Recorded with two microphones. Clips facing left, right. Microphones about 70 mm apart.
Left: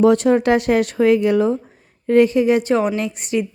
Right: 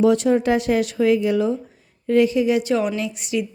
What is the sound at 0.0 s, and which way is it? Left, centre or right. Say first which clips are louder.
A woman's voice: left 3 dB; left.